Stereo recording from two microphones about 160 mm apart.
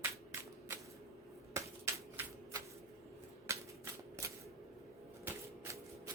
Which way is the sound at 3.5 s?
20° right (ahead or behind).